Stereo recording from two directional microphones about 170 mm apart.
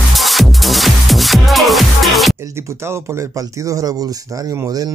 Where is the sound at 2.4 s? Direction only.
15° right (ahead or behind).